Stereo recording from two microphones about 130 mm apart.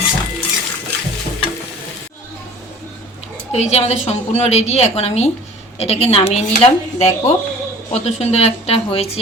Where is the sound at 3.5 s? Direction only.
55° left (ahead or behind).